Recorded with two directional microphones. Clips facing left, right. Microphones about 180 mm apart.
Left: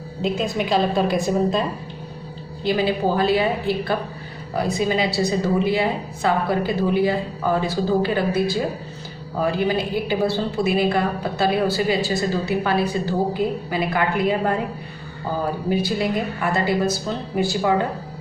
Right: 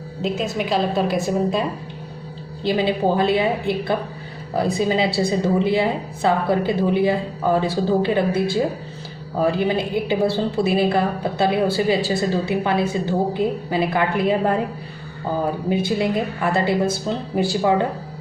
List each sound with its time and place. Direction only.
0.2 s a woman's voice: centre (ahead or behind)
2.6 s a woman's voice: 25° right (ahead or behind)
15.7 s a woman's voice: 25° right (ahead or behind)